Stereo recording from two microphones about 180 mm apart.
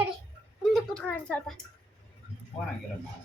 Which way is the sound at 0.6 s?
Centre (ahead or behind).